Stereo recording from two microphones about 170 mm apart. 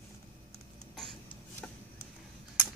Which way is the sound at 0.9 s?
Centre (ahead or behind).